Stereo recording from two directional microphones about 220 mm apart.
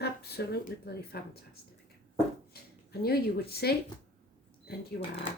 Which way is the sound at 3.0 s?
45° left (ahead or behind).